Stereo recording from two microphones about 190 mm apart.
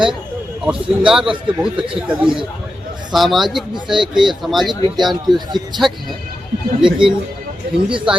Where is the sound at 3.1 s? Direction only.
Centre (ahead or behind).